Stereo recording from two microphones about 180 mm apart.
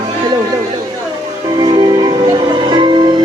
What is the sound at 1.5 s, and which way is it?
Music, 25° right (ahead or behind).